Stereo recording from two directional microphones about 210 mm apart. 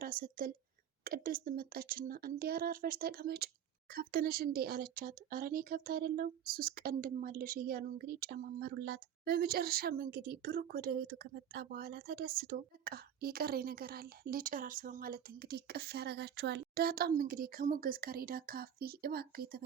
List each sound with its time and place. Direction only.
0.0 s a woman's voice: 45° right (ahead or behind)